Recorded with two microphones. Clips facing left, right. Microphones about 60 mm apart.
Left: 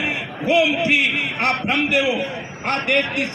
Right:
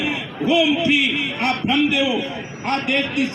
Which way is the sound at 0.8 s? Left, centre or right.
Left.